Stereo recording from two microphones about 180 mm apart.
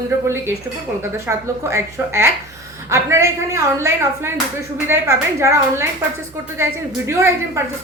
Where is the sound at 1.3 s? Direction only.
10° right (ahead or behind).